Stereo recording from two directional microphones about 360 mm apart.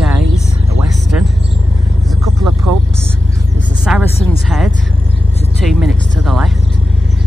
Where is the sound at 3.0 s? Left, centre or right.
Centre.